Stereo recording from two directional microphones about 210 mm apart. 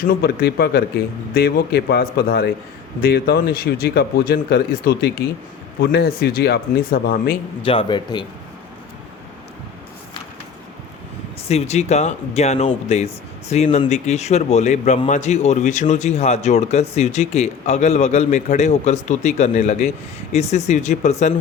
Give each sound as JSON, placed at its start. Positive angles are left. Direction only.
{"t": 0.1, "sound": "speech", "side_deg": 45}
{"t": 7.6, "sound": "speech", "side_deg": 25}
{"t": 11.4, "sound": "speech", "side_deg": 30}